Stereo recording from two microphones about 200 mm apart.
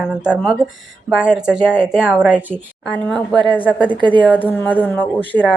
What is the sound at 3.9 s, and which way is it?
Speech, 25° right (ahead or behind).